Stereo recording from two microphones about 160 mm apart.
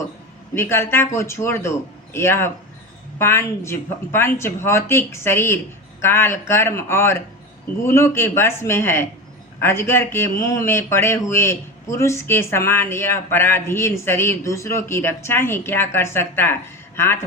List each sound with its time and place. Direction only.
0.5 s speech: 15° left (ahead or behind)